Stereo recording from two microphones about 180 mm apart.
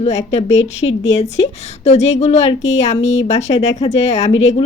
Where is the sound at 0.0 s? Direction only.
35° left (ahead or behind).